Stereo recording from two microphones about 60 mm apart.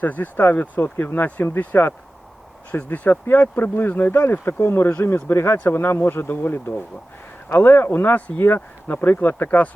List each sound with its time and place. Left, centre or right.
0.0 s speech: left